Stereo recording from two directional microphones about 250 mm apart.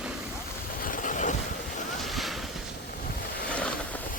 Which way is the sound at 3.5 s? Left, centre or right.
Centre.